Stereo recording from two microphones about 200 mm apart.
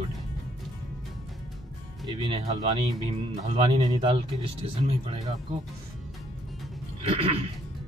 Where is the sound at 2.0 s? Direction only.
25° right (ahead or behind).